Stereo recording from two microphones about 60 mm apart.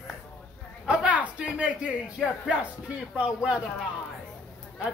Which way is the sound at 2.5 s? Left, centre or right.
Right.